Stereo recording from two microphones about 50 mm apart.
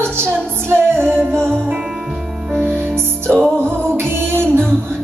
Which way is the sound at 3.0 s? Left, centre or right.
Right.